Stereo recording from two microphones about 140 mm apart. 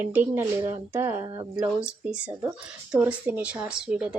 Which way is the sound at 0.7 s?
20° right (ahead or behind).